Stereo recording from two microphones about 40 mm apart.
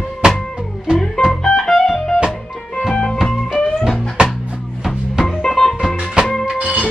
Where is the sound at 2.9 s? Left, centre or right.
Centre.